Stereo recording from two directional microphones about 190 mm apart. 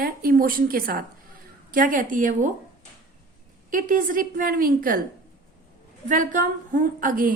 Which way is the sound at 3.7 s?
45° right (ahead or behind).